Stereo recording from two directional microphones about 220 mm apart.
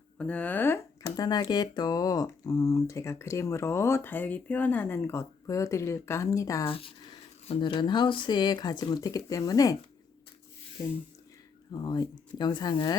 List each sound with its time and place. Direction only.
0.2 s speech: 5° left (ahead or behind)
11.7 s speech: 20° left (ahead or behind)